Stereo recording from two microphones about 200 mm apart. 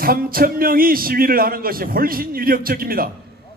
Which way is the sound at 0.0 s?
45° right (ahead or behind).